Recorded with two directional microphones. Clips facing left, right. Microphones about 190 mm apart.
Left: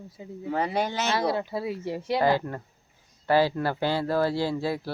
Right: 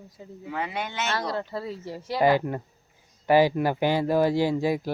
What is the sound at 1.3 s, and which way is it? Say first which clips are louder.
Speech: left 3 dB; 10° left (ahead or behind).